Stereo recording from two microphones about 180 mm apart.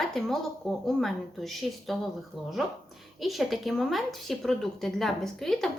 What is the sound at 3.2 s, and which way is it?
Speech, centre (ahead or behind).